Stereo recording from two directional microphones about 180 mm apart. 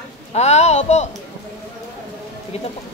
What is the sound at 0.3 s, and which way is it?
Speech, 35° left (ahead or behind).